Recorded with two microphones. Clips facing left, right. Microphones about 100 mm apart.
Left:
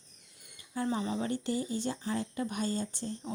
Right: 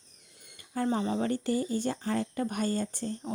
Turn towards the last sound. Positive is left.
turn(degrees=-50)  # may be behind; listen again after turning